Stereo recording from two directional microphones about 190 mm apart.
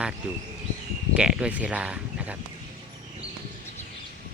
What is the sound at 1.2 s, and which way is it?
Speech, 5° right (ahead or behind).